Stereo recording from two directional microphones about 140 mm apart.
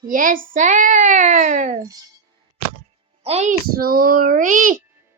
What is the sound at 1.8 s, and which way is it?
Speech, 25° right (ahead or behind).